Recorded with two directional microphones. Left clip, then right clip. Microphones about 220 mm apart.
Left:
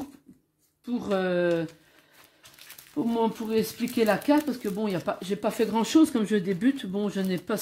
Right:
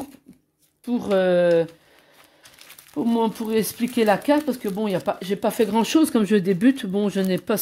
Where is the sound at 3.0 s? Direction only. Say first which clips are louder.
Right 4 dB; 45° right (ahead or behind).